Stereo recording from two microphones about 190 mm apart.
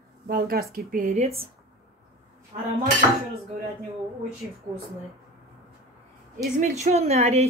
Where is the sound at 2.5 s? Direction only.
30° right (ahead or behind).